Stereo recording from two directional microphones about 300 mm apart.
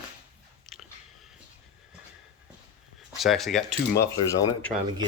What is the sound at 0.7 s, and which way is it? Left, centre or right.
Chewing, centre.